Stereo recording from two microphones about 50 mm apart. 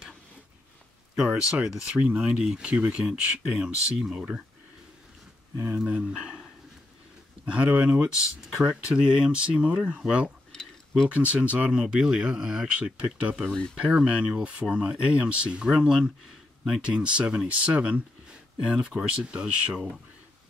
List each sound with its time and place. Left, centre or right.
1.6 s speech: centre
5.9 s speech: right
6.1 s speech: centre
7.5 s speech: right
8.2 s speech: centre
10.5 s a sound: centre
11.1 s speech: right